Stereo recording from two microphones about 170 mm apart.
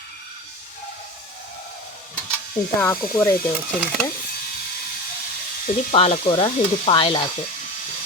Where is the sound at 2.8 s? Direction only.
15° left (ahead or behind).